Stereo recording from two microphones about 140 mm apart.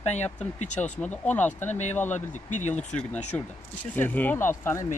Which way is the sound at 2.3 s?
65° left (ahead or behind).